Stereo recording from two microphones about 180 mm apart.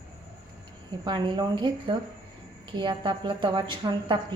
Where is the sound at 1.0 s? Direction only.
25° right (ahead or behind).